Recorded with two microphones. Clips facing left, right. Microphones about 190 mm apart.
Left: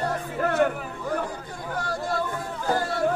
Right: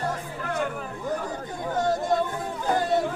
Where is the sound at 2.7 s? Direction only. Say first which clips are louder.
Right 2 dB; 20° right (ahead or behind).